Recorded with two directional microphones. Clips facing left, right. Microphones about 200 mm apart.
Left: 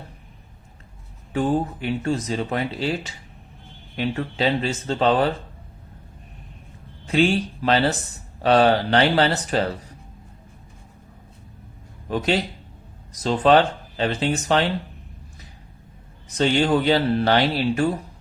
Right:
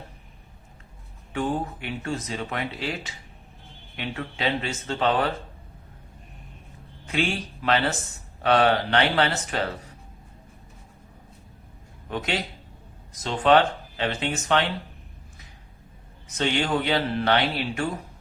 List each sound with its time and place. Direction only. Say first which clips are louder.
1.3 s speech: left 5 dB; 35° left (ahead or behind)
7.0 s speech: left 8 dB; 35° left (ahead or behind)
12.1 s speech: left 6 dB; 35° left (ahead or behind)
16.4 s speech: left 6 dB; 35° left (ahead or behind)